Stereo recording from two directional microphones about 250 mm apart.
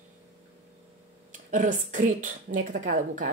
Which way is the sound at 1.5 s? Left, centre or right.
Right.